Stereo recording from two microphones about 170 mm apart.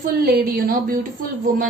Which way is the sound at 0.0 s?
60° right (ahead or behind).